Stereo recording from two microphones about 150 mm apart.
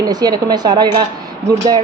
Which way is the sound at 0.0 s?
25° right (ahead or behind).